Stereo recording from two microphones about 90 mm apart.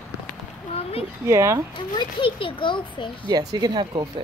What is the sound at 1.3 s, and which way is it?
Speech, 35° right (ahead or behind).